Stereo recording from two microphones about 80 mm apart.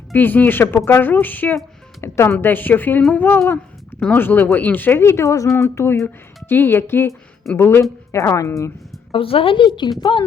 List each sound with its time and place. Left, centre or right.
0.1 s a woman's voice: left
2.0 s a woman's voice: left
5.6 s a woman's voice: left
9.1 s a woman's voice: left